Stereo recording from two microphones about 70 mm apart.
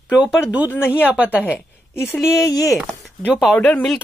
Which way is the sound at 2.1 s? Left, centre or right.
Centre.